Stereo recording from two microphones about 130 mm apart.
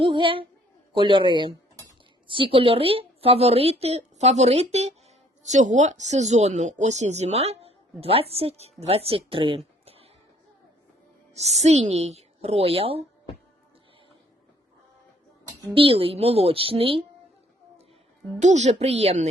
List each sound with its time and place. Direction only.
0.0 s a man's voice: 40° right (ahead or behind)
11.3 s speech: 55° right (ahead or behind)
15.7 s a woman's voice: 45° right (ahead or behind)
18.3 s speech: 65° right (ahead or behind)